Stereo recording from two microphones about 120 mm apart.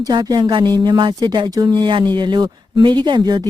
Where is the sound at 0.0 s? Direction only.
35° right (ahead or behind).